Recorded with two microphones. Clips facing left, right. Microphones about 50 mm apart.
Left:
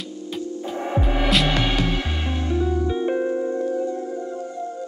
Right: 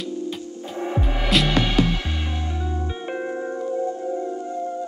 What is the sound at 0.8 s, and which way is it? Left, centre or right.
Music, left.